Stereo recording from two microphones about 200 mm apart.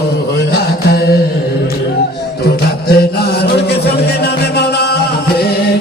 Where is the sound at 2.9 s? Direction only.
55° left (ahead or behind).